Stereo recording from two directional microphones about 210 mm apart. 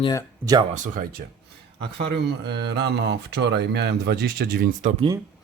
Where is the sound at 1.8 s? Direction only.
55° right (ahead or behind).